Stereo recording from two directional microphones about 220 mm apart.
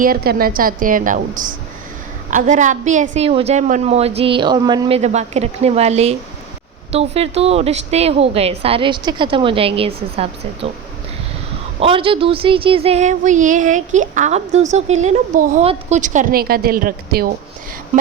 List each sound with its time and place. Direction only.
0.0 s a woman's voice: 40° right (ahead or behind); by 10.7 s 25° right (ahead or behind)
11.8 s speech: 25° right (ahead or behind); by 17.3 s 45° right (ahead or behind)